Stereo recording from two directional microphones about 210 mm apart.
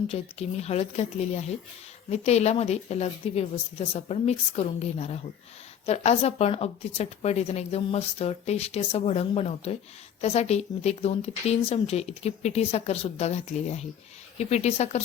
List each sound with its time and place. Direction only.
0.1 s a woman's voice: 30° left (ahead or behind)